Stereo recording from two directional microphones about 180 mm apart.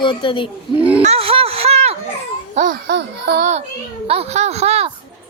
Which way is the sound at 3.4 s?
40° right (ahead or behind).